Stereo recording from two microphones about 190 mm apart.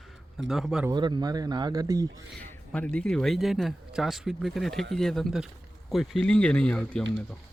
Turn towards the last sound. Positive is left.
turn(degrees=5)  # may be behind; listen again after turning